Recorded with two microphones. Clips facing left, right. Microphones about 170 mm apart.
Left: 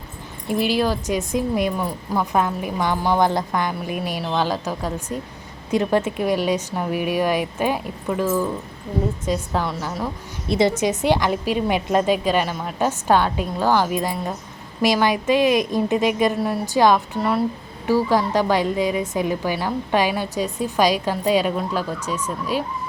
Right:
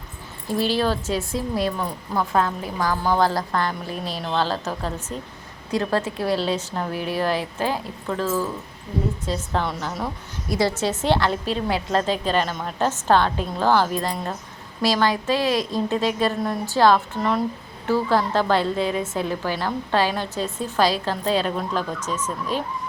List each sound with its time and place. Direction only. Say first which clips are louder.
0.4 s a woman's voice: left 2 dB; 15° left (ahead or behind)
9.5 s a woman's voice: left 1 dB; 5° left (ahead or behind)
10.5 s a woman's voice: left 3 dB; 20° left (ahead or behind)